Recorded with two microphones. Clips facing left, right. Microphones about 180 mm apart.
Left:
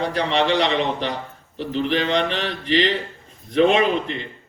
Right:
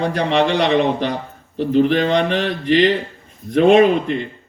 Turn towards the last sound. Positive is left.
turn(degrees=-55)  # may be behind; listen again after turning